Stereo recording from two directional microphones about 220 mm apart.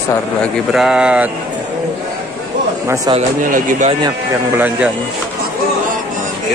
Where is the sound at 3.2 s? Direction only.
35° right (ahead or behind).